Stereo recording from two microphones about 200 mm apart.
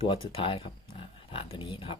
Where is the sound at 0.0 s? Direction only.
25° left (ahead or behind).